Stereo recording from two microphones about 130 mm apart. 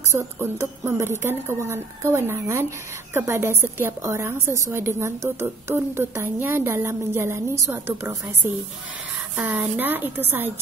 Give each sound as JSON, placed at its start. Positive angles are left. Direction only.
{"t": 0.1, "sound": "a woman's voice", "side_deg": -20}
{"t": 9.4, "sound": "a woman's voice", "side_deg": -15}